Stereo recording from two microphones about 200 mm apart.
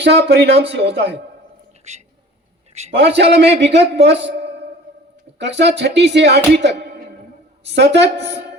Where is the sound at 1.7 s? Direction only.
35° right (ahead or behind).